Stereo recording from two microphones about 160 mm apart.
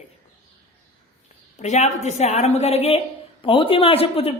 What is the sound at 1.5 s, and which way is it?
A woman's voice, 45° left (ahead or behind).